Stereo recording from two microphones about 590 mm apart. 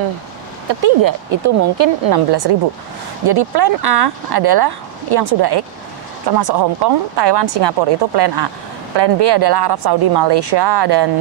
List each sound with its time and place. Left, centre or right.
0.7 s speech: right